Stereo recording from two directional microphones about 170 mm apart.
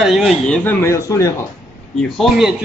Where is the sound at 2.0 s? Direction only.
Centre (ahead or behind).